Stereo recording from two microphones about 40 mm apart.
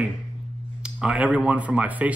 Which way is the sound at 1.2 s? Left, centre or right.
Right.